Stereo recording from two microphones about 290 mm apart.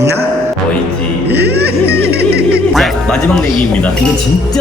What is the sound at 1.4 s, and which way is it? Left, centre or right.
Music, right.